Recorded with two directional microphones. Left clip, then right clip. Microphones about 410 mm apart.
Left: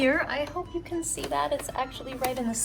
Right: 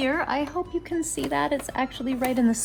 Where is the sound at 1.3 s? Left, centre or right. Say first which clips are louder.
Right 2 dB; right.